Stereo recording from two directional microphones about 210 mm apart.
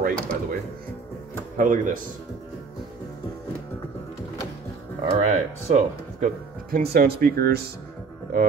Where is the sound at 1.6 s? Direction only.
40° right (ahead or behind).